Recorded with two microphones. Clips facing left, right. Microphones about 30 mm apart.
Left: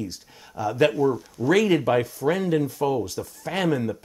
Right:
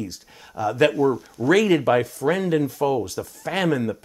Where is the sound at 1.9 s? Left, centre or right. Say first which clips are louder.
Right 2 dB; right.